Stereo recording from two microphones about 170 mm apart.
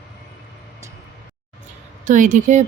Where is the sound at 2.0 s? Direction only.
50° right (ahead or behind).